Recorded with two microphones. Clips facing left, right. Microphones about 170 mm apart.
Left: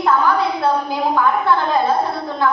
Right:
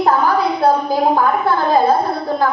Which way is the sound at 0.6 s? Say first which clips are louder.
Right 7 dB; 40° right (ahead or behind).